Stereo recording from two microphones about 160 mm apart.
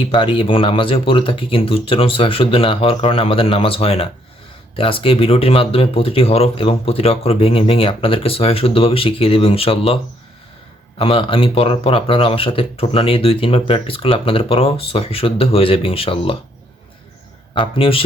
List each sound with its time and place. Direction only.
0.0 s speech: 35° left (ahead or behind)
17.5 s speech: 35° left (ahead or behind)